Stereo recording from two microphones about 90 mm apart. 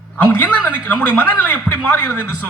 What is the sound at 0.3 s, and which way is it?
A man's voice, 20° left (ahead or behind).